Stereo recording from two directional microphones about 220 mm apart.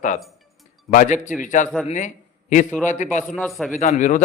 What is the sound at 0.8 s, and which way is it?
Speech, 35° left (ahead or behind).